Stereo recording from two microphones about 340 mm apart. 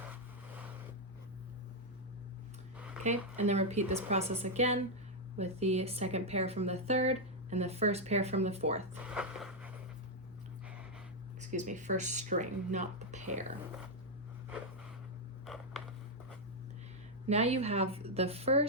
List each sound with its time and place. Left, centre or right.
0.0 s vehicle: centre
3.3 s a woman's voice: centre
9.0 s a sound: centre
11.3 s a woman's voice: right
17.2 s a woman's voice: centre